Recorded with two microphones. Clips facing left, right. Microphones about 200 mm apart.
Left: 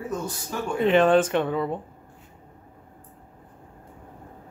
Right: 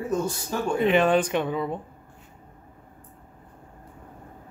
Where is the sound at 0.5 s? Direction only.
30° right (ahead or behind).